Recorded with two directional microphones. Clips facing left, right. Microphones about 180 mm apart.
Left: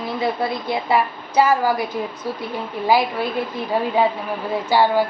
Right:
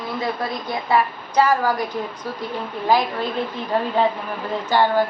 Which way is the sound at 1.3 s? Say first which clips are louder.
Left 1 dB; 10° left (ahead or behind).